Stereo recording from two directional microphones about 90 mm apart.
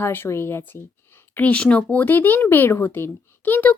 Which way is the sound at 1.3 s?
15° left (ahead or behind).